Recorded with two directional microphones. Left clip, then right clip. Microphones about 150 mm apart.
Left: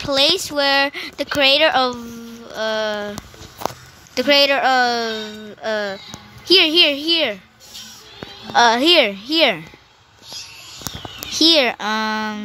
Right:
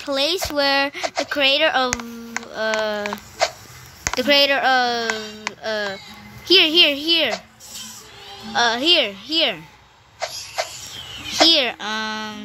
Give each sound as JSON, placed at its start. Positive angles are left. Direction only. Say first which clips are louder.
{"t": 0.0, "sound": "speech", "louder": "left 4 dB", "side_deg": 0}
{"t": 4.1, "sound": "speech", "louder": "left 2 dB", "side_deg": 5}
{"t": 8.5, "sound": "a woman's voice", "louder": "left 4 dB", "side_deg": 20}
{"t": 11.3, "sound": "speech", "louder": "left 1 dB", "side_deg": 20}